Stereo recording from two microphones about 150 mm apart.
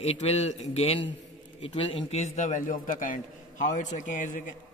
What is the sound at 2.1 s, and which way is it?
A man's voice, 55° left (ahead or behind).